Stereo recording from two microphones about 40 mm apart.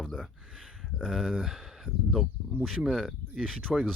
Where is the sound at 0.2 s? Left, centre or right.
Centre.